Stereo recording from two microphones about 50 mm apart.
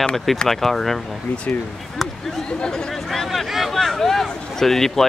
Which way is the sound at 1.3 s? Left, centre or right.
Left.